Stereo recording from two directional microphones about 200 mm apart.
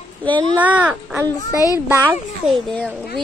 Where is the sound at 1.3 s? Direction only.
15° left (ahead or behind).